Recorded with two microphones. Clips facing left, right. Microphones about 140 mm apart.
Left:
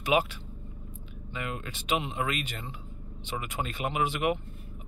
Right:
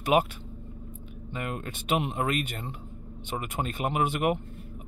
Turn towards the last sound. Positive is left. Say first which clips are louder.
# right 2 dB
turn(degrees=-50)  # may be behind; listen again after turning